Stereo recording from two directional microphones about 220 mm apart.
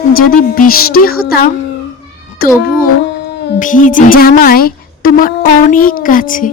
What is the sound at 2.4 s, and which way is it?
A woman's voice, 45° left (ahead or behind).